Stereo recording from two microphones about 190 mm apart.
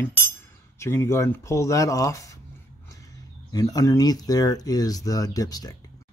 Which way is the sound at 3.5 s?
20° left (ahead or behind).